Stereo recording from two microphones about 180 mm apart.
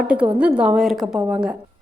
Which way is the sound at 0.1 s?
5° right (ahead or behind).